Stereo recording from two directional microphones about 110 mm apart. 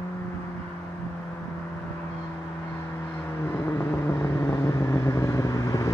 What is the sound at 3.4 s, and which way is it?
Vehicle, 20° left (ahead or behind).